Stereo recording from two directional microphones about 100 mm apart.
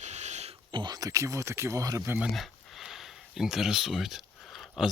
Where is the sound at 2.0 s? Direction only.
15° right (ahead or behind).